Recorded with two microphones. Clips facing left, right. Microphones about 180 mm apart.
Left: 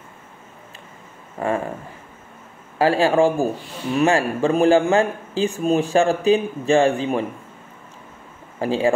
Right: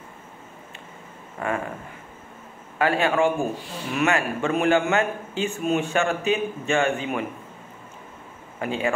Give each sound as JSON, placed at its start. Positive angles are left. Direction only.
{"t": 1.4, "sound": "speech", "side_deg": 30}
{"t": 2.8, "sound": "a man's voice", "side_deg": 30}
{"t": 8.5, "sound": "a man's voice", "side_deg": 30}